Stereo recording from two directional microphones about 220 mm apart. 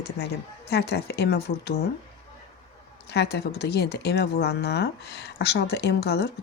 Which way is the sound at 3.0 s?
50° left (ahead or behind).